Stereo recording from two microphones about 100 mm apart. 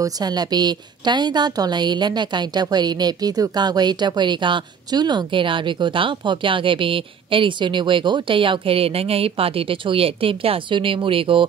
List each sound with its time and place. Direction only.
0.0 s a woman's voice: 45° right (ahead or behind); by 11.4 s 60° right (ahead or behind)